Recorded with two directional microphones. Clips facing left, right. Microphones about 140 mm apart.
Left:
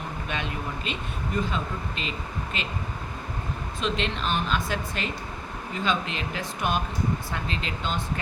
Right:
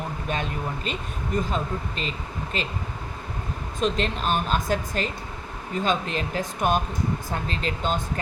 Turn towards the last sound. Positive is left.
turn(degrees=-40)  # may be behind; listen again after turning